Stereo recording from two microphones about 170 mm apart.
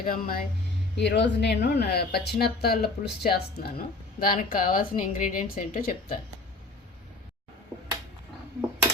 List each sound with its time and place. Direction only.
0.0 s speech: 55° left (ahead or behind)
0.9 s speech: 85° left; by 6.1 s 55° left (ahead or behind)